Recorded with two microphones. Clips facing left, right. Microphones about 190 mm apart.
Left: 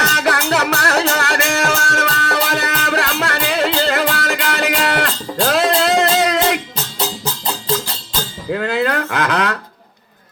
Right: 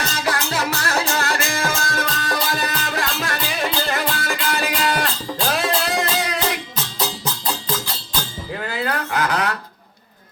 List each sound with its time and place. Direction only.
0.0 s music: 70° left (ahead or behind)
8.4 s music: 65° left (ahead or behind)